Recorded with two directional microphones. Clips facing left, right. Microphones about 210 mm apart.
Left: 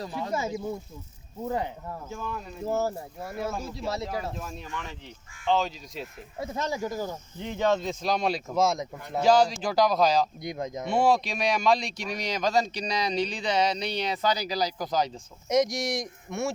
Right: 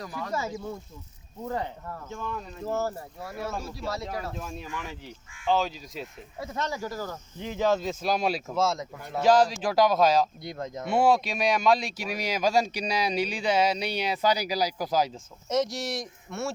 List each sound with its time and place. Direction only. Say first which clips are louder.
0.0 s speech: left 2 dB; 25° left (ahead or behind)
4.3 s speech: even; centre (ahead or behind)
6.4 s speech: left 2 dB; 25° left (ahead or behind)
7.3 s speech: even; centre (ahead or behind)
8.5 s speech: left 2 dB; 15° left (ahead or behind)
9.2 s speech: even; centre (ahead or behind)
10.4 s speech: left 2 dB; 15° left (ahead or behind)
10.8 s speech: right 1 dB; 5° right (ahead or behind)
15.4 s speech: left 3 dB; 15° left (ahead or behind)